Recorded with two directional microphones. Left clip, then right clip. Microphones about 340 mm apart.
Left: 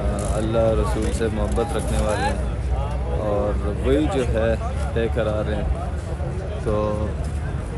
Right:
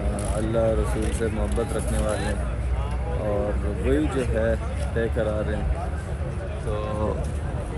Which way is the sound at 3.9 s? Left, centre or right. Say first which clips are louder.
Left 4 dB; centre.